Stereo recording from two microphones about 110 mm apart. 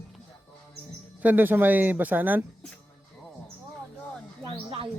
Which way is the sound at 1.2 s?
15° right (ahead or behind).